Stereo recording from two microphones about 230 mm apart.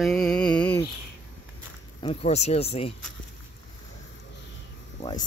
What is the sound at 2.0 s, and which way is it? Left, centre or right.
Speech, left.